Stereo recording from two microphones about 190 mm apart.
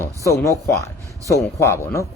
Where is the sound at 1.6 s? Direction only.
15° left (ahead or behind).